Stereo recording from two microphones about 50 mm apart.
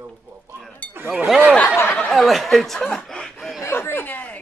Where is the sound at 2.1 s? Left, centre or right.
Centre.